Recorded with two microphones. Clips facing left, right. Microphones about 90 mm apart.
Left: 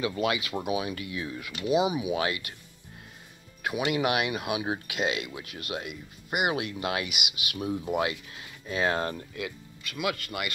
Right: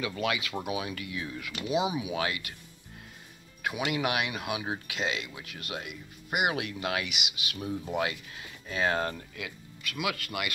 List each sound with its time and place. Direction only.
0.2 s speech: 10° left (ahead or behind)
1.7 s speech: 5° left (ahead or behind)
3.6 s speech: 5° left (ahead or behind)
9.9 s speech: 5° right (ahead or behind)